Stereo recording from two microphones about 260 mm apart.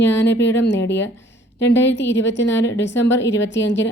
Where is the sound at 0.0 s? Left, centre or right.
Left.